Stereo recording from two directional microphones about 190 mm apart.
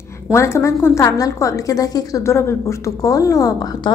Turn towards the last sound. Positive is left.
turn(degrees=20)  # may be behind; listen again after turning